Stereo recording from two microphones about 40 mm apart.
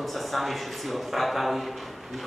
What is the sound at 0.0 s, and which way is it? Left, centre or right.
A man's voice, centre.